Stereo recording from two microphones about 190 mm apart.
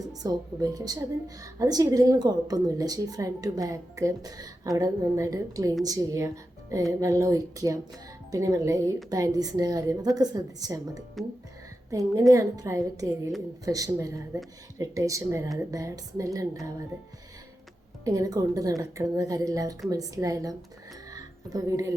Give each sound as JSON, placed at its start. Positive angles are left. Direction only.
{"t": 0.1, "sound": "a woman's voice", "side_deg": -20}
{"t": 18.0, "sound": "speech", "side_deg": -15}
{"t": 21.1, "sound": "a sound", "side_deg": -20}